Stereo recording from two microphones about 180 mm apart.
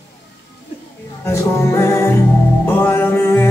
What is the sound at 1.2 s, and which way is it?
Music, 15° left (ahead or behind).